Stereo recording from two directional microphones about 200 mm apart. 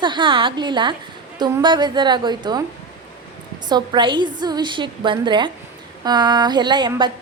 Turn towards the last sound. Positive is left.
turn(degrees=-20)  # may be behind; listen again after turning